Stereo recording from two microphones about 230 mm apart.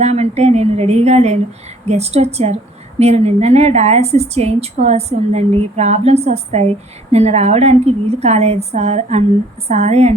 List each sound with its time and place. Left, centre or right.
0.0 s a woman's voice: right